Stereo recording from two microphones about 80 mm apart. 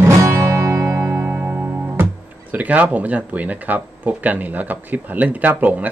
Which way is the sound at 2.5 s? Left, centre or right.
Centre.